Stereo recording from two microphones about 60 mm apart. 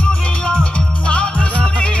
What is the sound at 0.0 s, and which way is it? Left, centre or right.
Music, centre.